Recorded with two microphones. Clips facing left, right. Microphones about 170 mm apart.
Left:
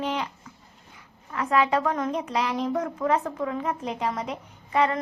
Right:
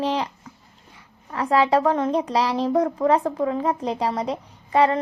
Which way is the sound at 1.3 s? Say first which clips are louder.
Right 4 dB; 35° right (ahead or behind).